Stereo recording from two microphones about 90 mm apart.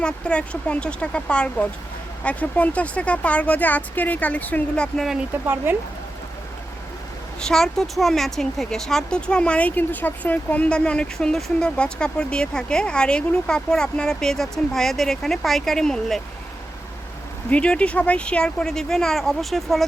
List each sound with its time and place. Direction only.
0.0 s speech: 10° left (ahead or behind)
4.9 s speech: 5° right (ahead or behind)
5.7 s speech: 25° right (ahead or behind)
7.4 s speech: 5° left (ahead or behind)
17.5 s speech: 10° left (ahead or behind)